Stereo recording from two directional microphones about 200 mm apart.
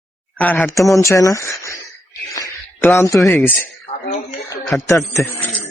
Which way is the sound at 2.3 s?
15° left (ahead or behind).